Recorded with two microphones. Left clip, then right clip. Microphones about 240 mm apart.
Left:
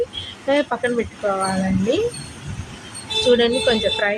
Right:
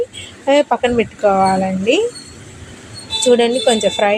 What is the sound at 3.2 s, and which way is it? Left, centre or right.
Speech, centre.